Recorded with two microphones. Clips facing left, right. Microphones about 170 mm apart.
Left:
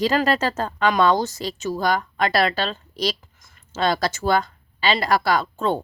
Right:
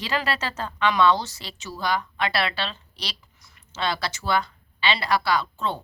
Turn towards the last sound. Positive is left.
turn(degrees=50)  # may be behind; listen again after turning